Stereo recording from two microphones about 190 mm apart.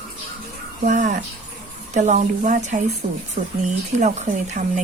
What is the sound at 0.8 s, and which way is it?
Speech, 40° right (ahead or behind).